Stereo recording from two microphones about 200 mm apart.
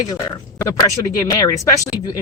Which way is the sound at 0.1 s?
15° left (ahead or behind).